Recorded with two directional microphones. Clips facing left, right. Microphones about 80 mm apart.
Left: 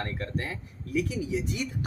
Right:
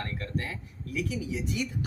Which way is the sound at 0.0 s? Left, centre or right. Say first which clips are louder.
Left 1 dB; left.